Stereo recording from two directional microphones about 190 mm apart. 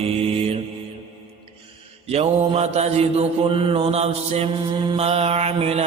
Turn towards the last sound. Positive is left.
turn(degrees=-35)  # may be behind; listen again after turning